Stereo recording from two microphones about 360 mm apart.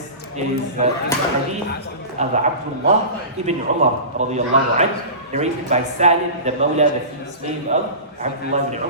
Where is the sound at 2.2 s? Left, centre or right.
Centre.